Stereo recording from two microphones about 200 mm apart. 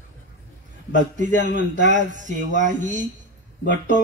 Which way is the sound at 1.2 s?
40° right (ahead or behind).